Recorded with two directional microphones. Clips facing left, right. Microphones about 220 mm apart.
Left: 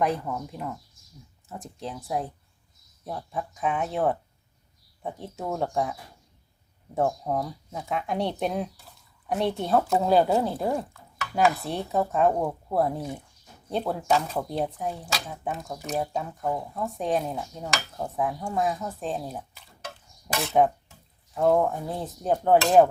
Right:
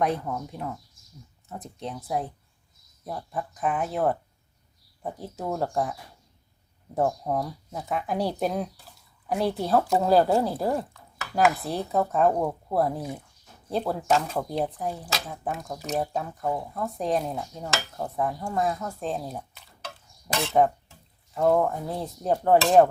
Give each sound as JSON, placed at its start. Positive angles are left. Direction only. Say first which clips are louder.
{"t": 0.0, "sound": "speech", "louder": "even", "side_deg": 0}